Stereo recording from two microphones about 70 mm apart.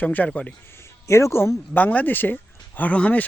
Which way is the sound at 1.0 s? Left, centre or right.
Left.